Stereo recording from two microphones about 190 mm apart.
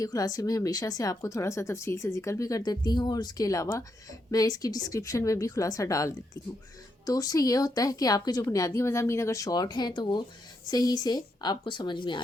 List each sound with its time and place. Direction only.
0.0 s speech: 20° left (ahead or behind)